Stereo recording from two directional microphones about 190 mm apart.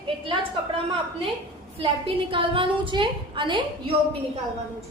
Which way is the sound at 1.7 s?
30° right (ahead or behind).